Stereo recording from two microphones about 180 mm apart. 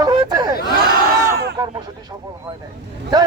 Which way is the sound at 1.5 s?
20° right (ahead or behind).